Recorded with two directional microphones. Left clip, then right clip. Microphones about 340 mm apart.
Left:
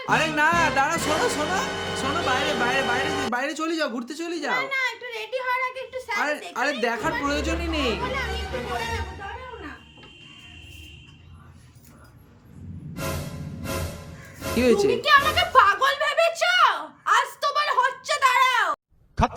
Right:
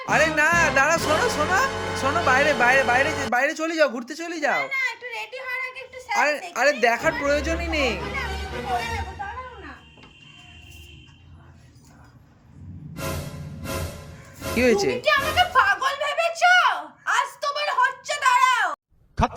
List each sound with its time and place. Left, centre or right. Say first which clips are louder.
0.0 s speech: right 2 dB; centre
12.9 s music: even; centre
19.1 s speech: even; centre